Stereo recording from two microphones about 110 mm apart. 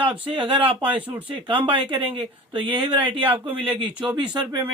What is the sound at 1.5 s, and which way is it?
Speech, 15° right (ahead or behind).